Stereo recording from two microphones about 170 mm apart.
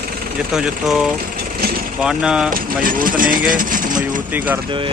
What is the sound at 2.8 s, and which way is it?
Speech, 55° right (ahead or behind).